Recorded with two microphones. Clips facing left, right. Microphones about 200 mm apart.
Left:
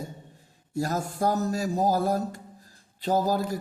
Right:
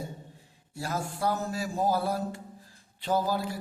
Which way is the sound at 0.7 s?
40° left (ahead or behind).